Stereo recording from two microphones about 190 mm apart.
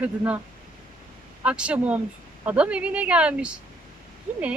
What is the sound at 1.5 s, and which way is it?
Speech, 5° right (ahead or behind).